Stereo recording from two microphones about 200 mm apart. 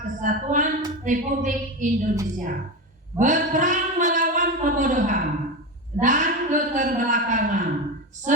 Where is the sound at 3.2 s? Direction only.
40° right (ahead or behind).